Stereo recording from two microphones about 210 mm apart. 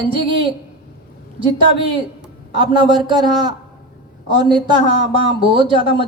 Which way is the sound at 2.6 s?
20° right (ahead or behind).